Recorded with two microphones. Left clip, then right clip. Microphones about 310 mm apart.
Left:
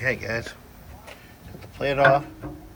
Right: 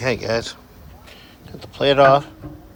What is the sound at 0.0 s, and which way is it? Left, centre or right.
Speech, centre.